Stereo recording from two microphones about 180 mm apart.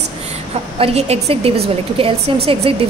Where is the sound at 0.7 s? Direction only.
35° right (ahead or behind).